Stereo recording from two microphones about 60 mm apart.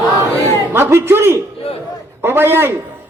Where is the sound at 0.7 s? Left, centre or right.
Right.